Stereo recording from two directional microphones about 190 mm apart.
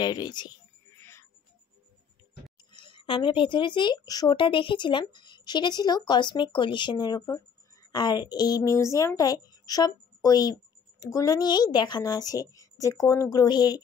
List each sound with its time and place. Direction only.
0.0 s speech: 20° left (ahead or behind)
2.7 s a woman's voice: 25° left (ahead or behind)